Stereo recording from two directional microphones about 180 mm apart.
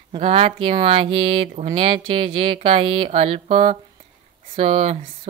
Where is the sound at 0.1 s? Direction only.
35° right (ahead or behind).